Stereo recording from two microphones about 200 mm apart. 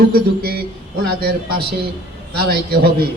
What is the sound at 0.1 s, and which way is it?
A man's voice, 50° right (ahead or behind).